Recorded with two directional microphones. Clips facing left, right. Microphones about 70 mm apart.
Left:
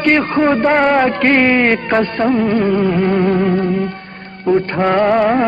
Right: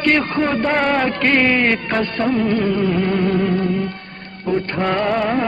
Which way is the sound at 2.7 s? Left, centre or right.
Left.